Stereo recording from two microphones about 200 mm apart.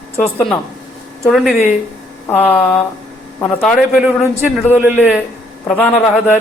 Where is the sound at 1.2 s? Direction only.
Centre (ahead or behind).